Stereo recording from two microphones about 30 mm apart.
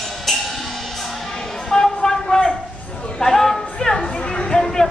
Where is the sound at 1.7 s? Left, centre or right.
Centre.